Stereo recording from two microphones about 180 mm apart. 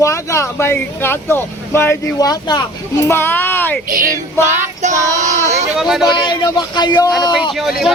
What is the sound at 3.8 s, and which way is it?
Female singing, 50° right (ahead or behind).